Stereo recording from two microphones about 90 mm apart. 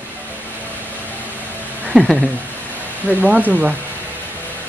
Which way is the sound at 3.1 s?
15° right (ahead or behind).